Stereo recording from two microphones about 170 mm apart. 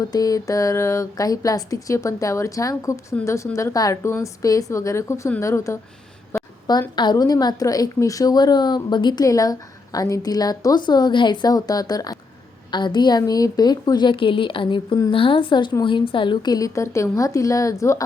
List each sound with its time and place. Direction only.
0.0 s a woman's voice: 20° left (ahead or behind)
6.3 s a sound: 15° left (ahead or behind)
6.7 s a woman's voice: 25° left (ahead or behind)